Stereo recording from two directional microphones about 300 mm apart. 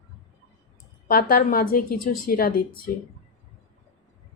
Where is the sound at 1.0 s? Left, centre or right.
Left.